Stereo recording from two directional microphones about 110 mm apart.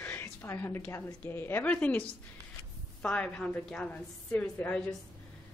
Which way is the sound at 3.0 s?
10° left (ahead or behind).